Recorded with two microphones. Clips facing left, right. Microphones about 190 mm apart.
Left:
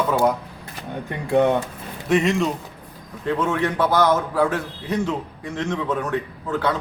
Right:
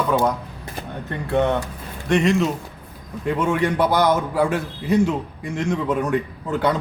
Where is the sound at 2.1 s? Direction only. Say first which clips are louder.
Right 1 dB; centre (ahead or behind).